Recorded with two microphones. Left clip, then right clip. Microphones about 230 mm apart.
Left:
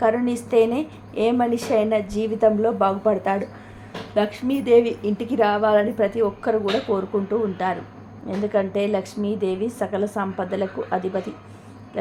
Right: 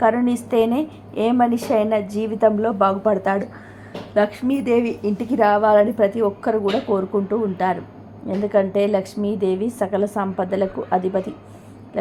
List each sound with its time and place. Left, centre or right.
0.0 s a woman's voice: centre